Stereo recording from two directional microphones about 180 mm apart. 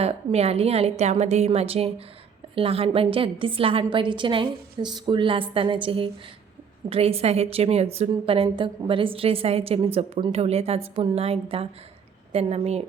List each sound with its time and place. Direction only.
0.0 s a woman's voice: 35° right (ahead or behind)